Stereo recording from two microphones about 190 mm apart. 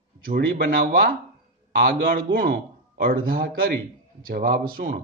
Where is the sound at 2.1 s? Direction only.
50° right (ahead or behind).